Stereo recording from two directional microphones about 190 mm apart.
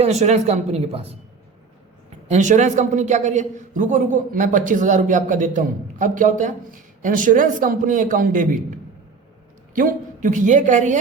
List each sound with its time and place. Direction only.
0.0 s a woman's voice: 35° right (ahead or behind)
2.2 s a man's voice: 40° right (ahead or behind)
9.7 s a woman's voice: 45° right (ahead or behind)